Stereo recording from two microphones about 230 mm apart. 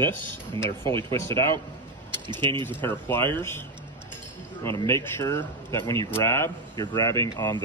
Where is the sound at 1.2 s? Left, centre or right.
Centre.